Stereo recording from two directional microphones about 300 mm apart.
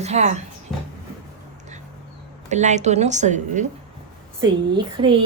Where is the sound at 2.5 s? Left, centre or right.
Right.